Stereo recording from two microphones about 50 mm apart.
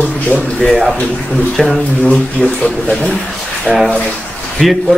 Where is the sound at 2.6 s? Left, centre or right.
Left.